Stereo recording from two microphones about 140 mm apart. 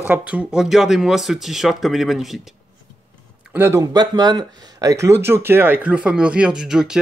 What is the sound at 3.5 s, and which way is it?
Speech, 20° right (ahead or behind).